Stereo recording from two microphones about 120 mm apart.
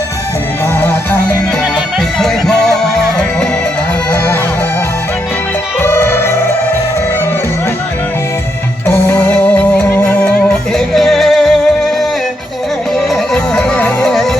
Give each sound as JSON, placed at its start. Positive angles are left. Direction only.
{"t": 2.1, "sound": "music", "side_deg": 5}
{"t": 5.8, "sound": "music", "side_deg": 20}
{"t": 8.9, "sound": "music", "side_deg": 15}
{"t": 10.8, "sound": "music", "side_deg": 0}
{"t": 13.3, "sound": "music", "side_deg": 5}